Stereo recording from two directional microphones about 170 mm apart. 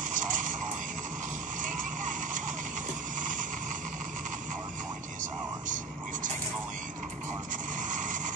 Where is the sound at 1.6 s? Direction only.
50° right (ahead or behind).